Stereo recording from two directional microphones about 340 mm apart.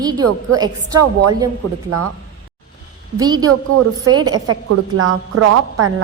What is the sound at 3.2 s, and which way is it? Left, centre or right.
Speech, centre.